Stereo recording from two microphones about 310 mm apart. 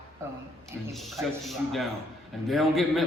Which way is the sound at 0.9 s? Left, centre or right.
Centre.